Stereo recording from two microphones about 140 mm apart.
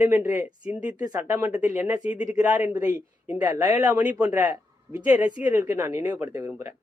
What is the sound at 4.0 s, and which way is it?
Speech, 10° right (ahead or behind).